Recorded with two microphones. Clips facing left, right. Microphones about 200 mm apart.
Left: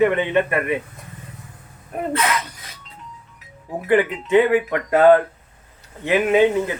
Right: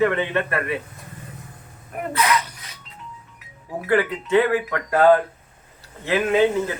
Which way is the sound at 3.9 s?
20° left (ahead or behind).